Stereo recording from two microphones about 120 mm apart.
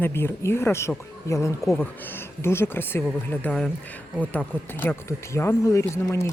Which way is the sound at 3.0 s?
5° left (ahead or behind).